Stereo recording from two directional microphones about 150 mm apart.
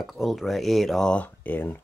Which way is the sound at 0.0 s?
Centre (ahead or behind).